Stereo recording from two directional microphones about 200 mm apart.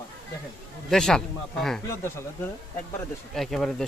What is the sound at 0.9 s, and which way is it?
Speech, 5° left (ahead or behind).